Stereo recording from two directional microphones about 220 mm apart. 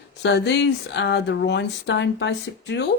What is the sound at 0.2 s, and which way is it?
Speech, 50° left (ahead or behind).